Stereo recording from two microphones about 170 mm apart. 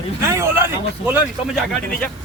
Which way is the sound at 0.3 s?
15° right (ahead or behind).